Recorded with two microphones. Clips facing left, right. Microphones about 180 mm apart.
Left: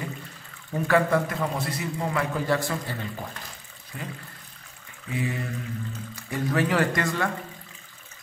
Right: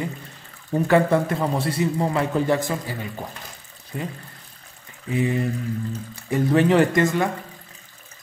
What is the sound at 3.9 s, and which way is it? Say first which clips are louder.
Speech: right 7 dB; 30° right (ahead or behind).